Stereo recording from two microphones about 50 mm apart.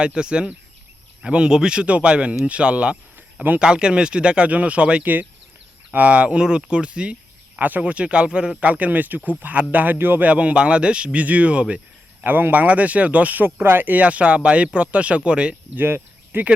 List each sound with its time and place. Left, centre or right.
0.0 s speech: centre
7.6 s speech: right
10.2 s speech: right
12.2 s speech: right
13.4 s speech: right
14.0 s speech: right
15.7 s speech: right